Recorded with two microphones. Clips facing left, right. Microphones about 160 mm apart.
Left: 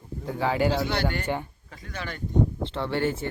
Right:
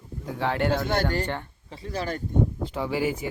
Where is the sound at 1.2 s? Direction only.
10° left (ahead or behind).